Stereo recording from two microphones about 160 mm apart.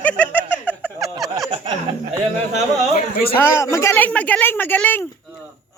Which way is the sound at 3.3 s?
15° left (ahead or behind).